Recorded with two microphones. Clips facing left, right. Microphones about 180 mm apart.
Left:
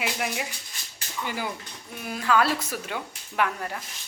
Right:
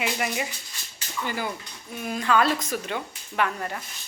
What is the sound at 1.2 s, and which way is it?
Speech, 10° left (ahead or behind).